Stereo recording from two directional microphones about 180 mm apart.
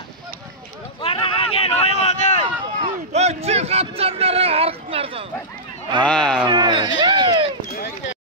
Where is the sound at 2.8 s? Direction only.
35° right (ahead or behind).